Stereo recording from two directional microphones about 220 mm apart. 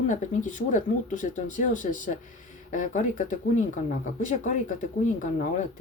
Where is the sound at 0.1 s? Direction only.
35° left (ahead or behind).